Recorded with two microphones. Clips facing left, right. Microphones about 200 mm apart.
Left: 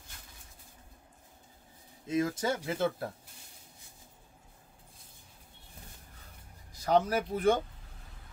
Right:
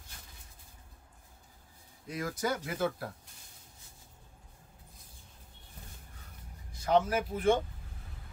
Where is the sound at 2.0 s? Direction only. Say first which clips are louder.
Left 4 dB; 25° left (ahead or behind).